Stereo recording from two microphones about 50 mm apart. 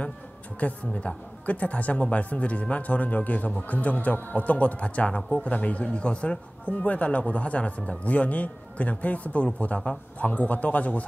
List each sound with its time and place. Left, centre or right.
0.6 s speech: left